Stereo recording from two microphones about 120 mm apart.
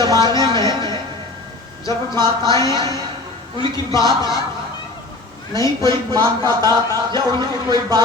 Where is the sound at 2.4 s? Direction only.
30° left (ahead or behind).